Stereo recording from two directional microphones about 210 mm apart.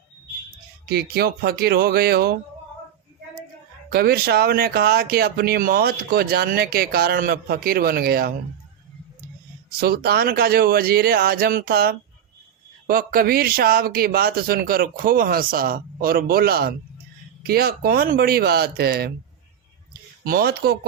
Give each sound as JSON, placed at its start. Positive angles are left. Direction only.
{"t": 0.9, "sound": "speech", "side_deg": -50}
{"t": 3.8, "sound": "speech", "side_deg": -50}
{"t": 9.6, "sound": "speech", "side_deg": -50}
{"t": 20.2, "sound": "speech", "side_deg": -45}